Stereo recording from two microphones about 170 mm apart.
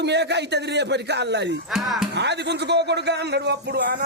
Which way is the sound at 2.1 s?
85° right.